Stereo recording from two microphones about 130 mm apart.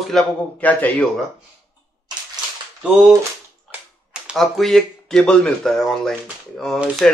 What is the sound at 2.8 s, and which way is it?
A man's voice, 5° right (ahead or behind).